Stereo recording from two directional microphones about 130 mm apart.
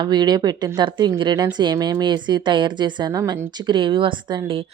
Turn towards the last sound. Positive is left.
turn(degrees=-40)  # may be behind; listen again after turning